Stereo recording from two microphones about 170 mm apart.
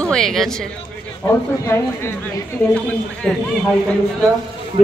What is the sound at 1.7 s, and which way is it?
Speech, 15° left (ahead or behind).